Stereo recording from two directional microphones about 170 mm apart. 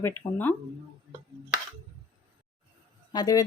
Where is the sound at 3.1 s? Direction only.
20° left (ahead or behind).